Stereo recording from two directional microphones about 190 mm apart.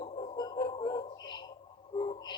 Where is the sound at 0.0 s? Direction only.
25° left (ahead or behind).